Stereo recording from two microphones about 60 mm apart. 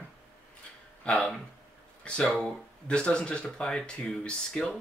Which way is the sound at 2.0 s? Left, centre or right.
Centre.